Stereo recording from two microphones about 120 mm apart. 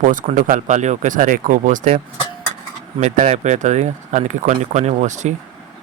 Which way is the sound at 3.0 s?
75° right (ahead or behind).